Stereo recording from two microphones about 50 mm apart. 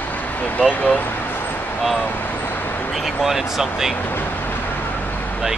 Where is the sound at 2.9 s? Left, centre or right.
Centre.